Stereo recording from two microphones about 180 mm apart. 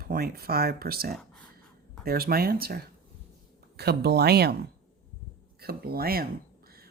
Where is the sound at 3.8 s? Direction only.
65° right (ahead or behind).